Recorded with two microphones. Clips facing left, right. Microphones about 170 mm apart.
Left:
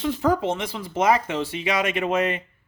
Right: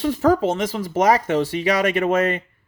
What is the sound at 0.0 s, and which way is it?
Speech, 40° right (ahead or behind).